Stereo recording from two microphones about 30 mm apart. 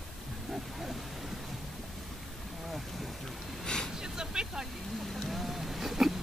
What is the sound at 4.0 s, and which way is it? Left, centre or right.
Vehicle, right.